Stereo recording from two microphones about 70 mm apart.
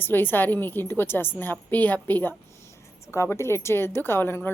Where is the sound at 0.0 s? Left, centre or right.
Left.